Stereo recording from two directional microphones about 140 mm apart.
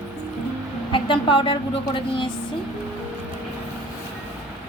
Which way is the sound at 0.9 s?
35° left (ahead or behind).